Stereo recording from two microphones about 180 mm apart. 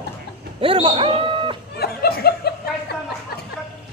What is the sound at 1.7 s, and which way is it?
Laughter, 60° left (ahead or behind).